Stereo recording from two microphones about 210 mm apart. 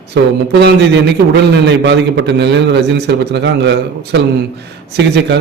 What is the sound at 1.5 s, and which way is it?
A man's voice, 55° right (ahead or behind).